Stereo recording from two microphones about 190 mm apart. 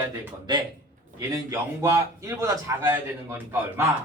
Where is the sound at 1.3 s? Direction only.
15° right (ahead or behind).